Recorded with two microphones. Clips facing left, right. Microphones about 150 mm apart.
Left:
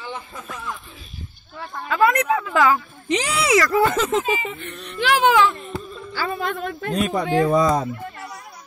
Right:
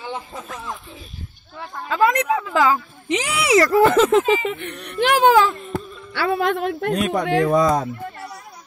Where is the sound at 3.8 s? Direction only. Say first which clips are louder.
Right 6 dB; 60° right (ahead or behind); by 5.5 s 40° right (ahead or behind).